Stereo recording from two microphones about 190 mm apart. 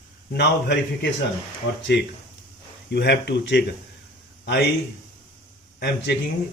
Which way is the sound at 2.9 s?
60° left (ahead or behind).